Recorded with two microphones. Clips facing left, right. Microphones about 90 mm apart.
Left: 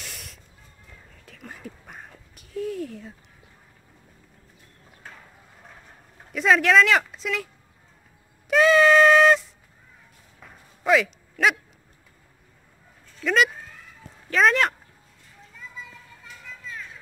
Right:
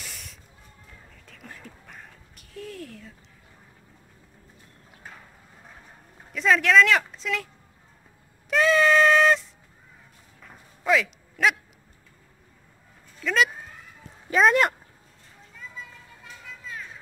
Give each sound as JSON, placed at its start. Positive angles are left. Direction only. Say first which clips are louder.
{"t": 0.0, "sound": "spray", "louder": "left 1 dB", "side_deg": 0}
{"t": 1.5, "sound": "a sound", "louder": "left 5 dB", "side_deg": 10}
{"t": 6.3, "sound": "speech", "louder": "left 1 dB", "side_deg": 5}
{"t": 8.5, "sound": "a sound", "louder": "left 3 dB", "side_deg": 5}
{"t": 10.4, "sound": "dog", "louder": "left 2 dB", "side_deg": 5}
{"t": 13.2, "sound": "speech", "louder": "left 2 dB", "side_deg": 0}
{"t": 15.5, "sound": "children playing", "louder": "even", "side_deg": 0}